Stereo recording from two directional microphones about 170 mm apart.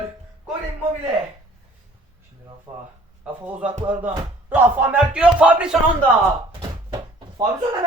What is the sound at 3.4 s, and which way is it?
Speech, 10° right (ahead or behind).